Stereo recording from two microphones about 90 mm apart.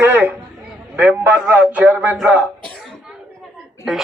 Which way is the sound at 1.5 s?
20° right (ahead or behind).